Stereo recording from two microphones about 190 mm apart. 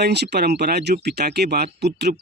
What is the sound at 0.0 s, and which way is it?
Speech, 60° right (ahead or behind).